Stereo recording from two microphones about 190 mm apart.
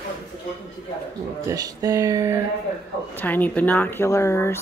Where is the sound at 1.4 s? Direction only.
20° right (ahead or behind).